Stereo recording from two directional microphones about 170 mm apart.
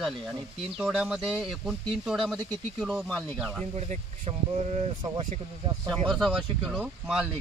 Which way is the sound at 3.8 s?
40° right (ahead or behind).